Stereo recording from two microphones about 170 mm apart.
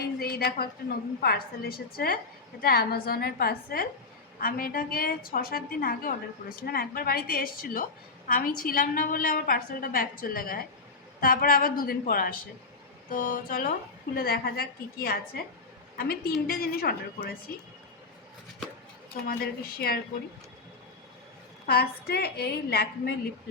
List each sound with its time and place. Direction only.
0.2 s a sound: 65° left (ahead or behind)
1.2 s a woman's voice: 65° left (ahead or behind)
19.3 s a woman's voice: 65° left (ahead or behind)
21.7 s a woman's voice: 70° left (ahead or behind)